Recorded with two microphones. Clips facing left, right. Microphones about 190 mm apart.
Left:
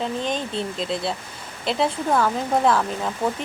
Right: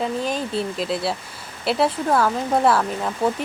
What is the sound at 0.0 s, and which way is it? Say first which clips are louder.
Speech: right 2 dB; 5° right (ahead or behind).